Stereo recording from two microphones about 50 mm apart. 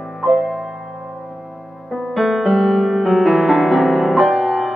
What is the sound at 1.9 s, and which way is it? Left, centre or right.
Music, centre.